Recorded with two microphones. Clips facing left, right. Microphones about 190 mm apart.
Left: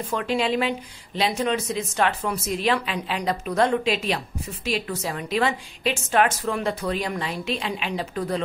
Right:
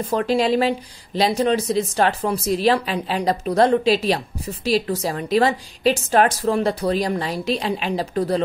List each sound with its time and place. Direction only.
0.1 s speech: 35° right (ahead or behind)